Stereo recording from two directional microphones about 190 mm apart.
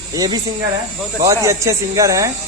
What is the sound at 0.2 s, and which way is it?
A man's voice, 20° right (ahead or behind).